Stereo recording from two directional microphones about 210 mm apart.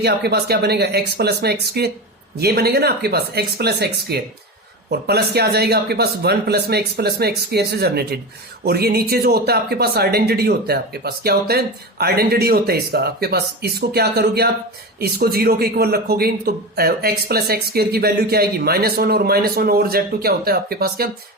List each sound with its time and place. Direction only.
0.0 s speech: 50° right (ahead or behind)